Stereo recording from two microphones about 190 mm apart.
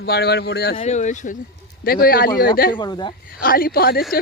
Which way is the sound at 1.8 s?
50° left (ahead or behind).